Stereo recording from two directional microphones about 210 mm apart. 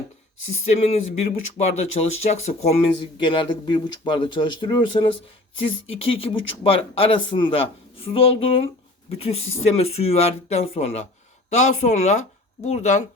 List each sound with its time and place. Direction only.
0.6 s speech: 30° left (ahead or behind)